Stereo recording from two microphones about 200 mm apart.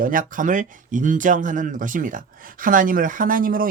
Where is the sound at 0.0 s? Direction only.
45° right (ahead or behind).